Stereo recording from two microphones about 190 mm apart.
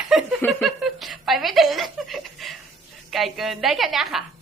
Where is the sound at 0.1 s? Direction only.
Centre (ahead or behind).